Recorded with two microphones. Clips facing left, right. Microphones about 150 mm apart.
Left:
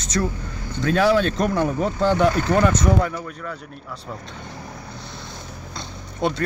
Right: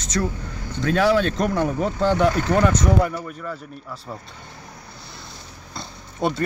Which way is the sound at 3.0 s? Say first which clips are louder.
Right 1 dB; 10° right (ahead or behind).